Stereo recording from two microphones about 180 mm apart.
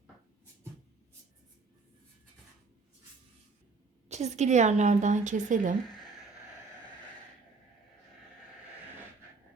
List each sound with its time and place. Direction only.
4.1 s a woman's voice: 40° right (ahead or behind)